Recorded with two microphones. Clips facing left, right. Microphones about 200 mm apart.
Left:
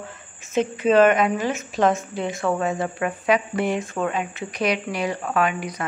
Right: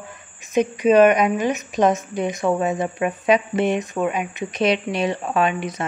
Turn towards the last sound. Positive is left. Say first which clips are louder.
# right 2 dB
turn(degrees=-25)  # may be behind; listen again after turning